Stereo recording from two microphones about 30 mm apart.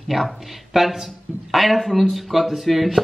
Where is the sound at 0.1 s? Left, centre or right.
Centre.